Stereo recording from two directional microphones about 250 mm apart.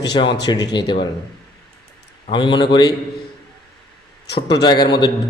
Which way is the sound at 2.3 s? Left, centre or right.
Centre.